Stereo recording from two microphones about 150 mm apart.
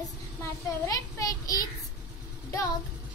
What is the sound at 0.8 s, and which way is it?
Speech, 20° left (ahead or behind).